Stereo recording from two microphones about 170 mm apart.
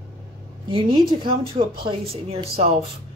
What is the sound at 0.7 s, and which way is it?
Speech, 30° right (ahead or behind).